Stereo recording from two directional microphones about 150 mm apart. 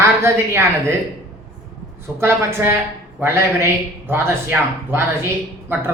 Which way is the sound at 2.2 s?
15° right (ahead or behind).